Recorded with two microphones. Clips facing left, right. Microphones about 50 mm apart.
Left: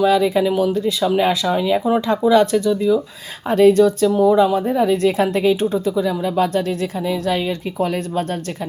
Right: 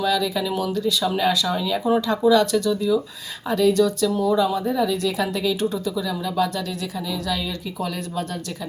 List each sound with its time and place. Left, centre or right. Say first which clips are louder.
0.0 s speech: left 7 dB; left
3.5 s speech: left 6 dB; left